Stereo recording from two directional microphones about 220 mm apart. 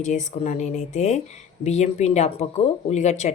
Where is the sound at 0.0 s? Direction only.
35° left (ahead or behind).